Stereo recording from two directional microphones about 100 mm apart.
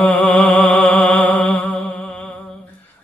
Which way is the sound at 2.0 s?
10° left (ahead or behind).